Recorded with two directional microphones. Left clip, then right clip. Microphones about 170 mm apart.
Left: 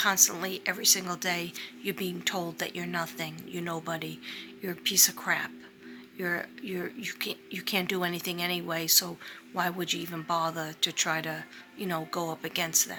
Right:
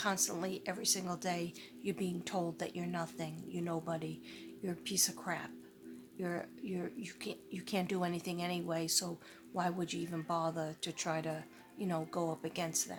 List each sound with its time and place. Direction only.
0.0 s a woman's voice: 10° right (ahead or behind)